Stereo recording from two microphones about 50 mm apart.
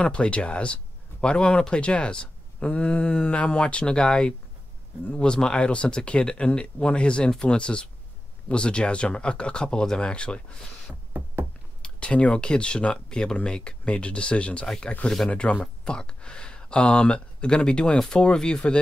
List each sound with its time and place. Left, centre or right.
0.0 s speech: left
11.8 s speech: left